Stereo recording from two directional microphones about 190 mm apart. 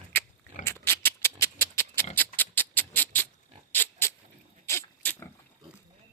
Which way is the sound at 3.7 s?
10° left (ahead or behind).